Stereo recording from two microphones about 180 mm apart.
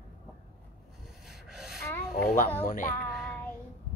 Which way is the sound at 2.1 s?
50° left (ahead or behind).